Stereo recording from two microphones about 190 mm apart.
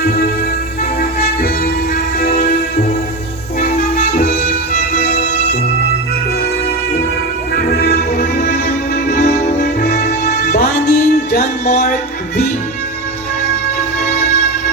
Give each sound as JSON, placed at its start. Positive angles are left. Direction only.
{"t": 0.0, "sound": "music", "side_deg": 55}
{"t": 4.2, "sound": "music", "side_deg": 55}
{"t": 7.5, "sound": "music", "side_deg": 55}
{"t": 9.0, "sound": "music", "side_deg": 35}
{"t": 10.8, "sound": "music", "side_deg": 60}
{"t": 11.3, "sound": "music", "side_deg": 40}